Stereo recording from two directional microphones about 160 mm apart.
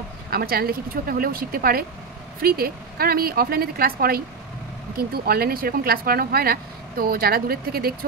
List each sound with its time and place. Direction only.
0.3 s speech: 70° right (ahead or behind)